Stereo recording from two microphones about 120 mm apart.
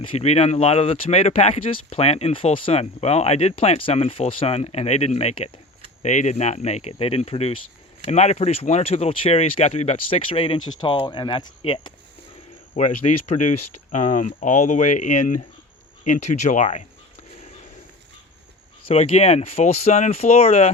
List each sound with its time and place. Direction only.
0.0 s speech: 55° left (ahead or behind)
6.0 s speech: 80° left; by 7.6 s 55° left (ahead or behind)
8.0 s speech: 70° left (ahead or behind); by 11.9 s 45° left (ahead or behind)
13.1 s speech: 65° left (ahead or behind)
13.9 s speech: 90° left
18.9 s speech: 55° left (ahead or behind)